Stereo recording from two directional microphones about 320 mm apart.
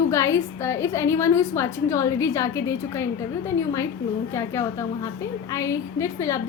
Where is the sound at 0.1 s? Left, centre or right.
Centre.